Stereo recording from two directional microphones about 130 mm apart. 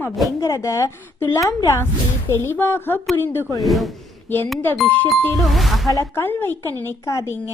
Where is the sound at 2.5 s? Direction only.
15° left (ahead or behind).